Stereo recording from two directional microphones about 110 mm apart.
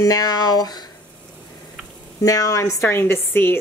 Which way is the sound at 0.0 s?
35° left (ahead or behind).